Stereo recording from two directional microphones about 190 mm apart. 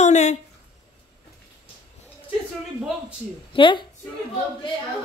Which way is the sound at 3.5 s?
25° left (ahead or behind).